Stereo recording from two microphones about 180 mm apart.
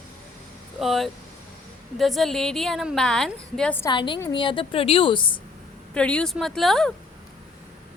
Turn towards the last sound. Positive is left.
turn(degrees=0)  # may be behind; listen again after turning